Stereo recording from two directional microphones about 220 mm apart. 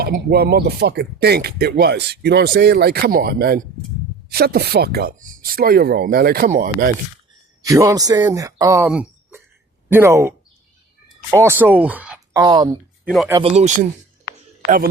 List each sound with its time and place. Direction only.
0.0 s speech: 45° right (ahead or behind)
7.6 s speech: 15° right (ahead or behind)
12.4 s speech: 15° right (ahead or behind)
13.4 s speech: 30° right (ahead or behind)